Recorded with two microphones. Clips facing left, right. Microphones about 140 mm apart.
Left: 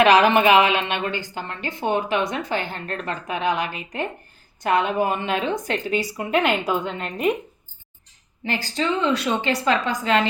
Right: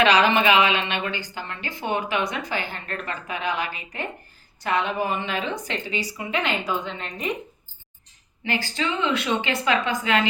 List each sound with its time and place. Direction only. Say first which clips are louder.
0.3 s a woman's voice: left 3 dB; 50° left (ahead or behind)
8.4 s speech: left 2 dB; 35° left (ahead or behind)